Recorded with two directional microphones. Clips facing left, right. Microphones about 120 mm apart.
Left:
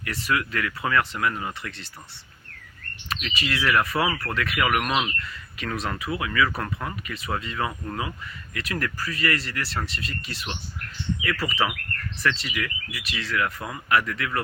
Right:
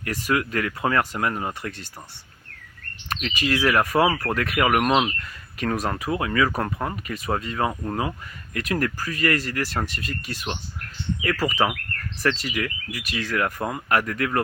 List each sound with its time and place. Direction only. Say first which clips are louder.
0.0 s speech: right 2 dB; 45° right (ahead or behind)
3.1 s speech: right 5 dB; 45° right (ahead or behind)
8.7 s speech: right 4 dB; 45° right (ahead or behind)